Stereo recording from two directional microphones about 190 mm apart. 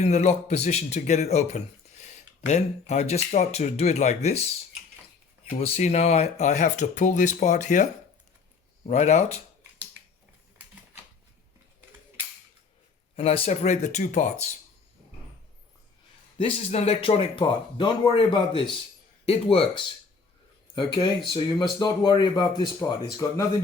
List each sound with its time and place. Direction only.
0.0 s speech: 35° left (ahead or behind)
5.5 s speech: 30° left (ahead or behind)
8.9 s speech: 35° left (ahead or behind)
13.1 s speech: 30° left (ahead or behind)
16.4 s speech: 30° left (ahead or behind); by 23.4 s 15° left (ahead or behind)